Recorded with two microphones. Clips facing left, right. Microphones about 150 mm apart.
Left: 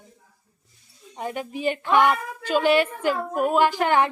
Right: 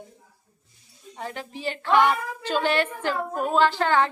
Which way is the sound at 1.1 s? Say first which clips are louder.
Left 5 dB; 15° left (ahead or behind).